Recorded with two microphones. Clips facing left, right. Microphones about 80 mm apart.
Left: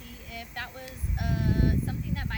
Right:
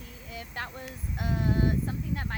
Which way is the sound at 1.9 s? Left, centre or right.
Centre.